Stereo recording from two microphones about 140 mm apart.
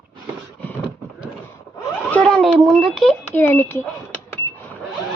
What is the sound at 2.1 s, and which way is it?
A child's voice, 5° left (ahead or behind).